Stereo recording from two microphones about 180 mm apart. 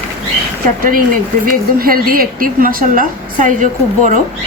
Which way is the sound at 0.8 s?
50° right (ahead or behind).